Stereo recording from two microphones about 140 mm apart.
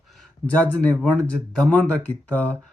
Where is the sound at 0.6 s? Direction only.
10° left (ahead or behind).